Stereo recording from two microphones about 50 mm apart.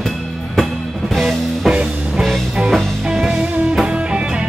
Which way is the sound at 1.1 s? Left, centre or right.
Centre.